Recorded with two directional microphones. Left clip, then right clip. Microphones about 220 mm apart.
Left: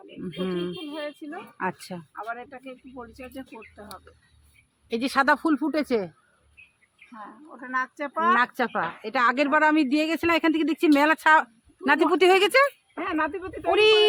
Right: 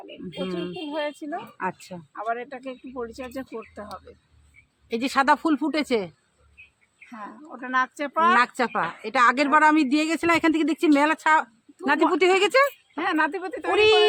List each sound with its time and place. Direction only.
0.4 s speech: 15° left (ahead or behind)
0.9 s a child's voice: 45° right (ahead or behind)
1.5 s speech: 10° left (ahead or behind)
2.1 s speech: 40° right (ahead or behind)
4.9 s speech: 5° left (ahead or behind)
7.1 s speech: 40° right (ahead or behind)
8.4 s a woman's voice: centre (ahead or behind)
13.0 s speech: 40° right (ahead or behind)
13.7 s speech: 10° left (ahead or behind)